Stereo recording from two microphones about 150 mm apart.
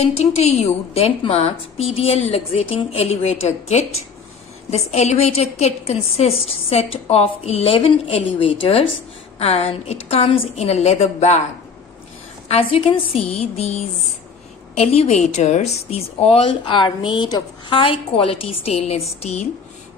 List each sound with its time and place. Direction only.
0.0 s a woman's voice: 45° left (ahead or behind)
12.4 s a woman's voice: 40° left (ahead or behind)